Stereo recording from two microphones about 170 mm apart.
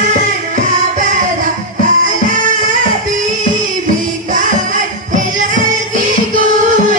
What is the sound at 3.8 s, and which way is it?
Music, 50° right (ahead or behind).